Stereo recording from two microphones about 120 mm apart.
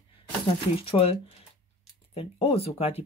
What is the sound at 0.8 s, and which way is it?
Speech, 50° left (ahead or behind).